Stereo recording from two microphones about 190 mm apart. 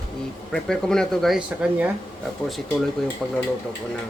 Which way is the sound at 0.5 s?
5° left (ahead or behind).